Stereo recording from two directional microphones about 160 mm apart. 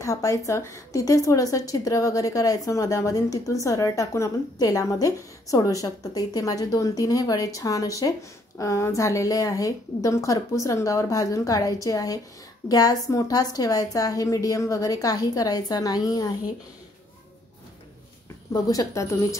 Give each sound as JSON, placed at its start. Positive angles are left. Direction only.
{"t": 0.0, "sound": "a woman's voice", "side_deg": 20}
{"t": 18.5, "sound": "a woman's voice", "side_deg": 25}